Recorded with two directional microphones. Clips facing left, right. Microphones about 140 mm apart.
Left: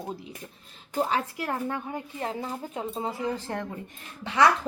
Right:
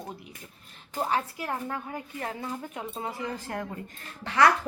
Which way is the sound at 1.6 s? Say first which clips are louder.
Left 3 dB; 25° left (ahead or behind).